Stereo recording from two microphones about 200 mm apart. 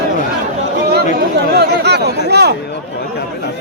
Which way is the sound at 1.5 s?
55° right (ahead or behind).